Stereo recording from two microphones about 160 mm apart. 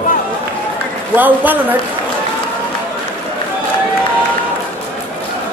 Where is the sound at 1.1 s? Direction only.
10° right (ahead or behind).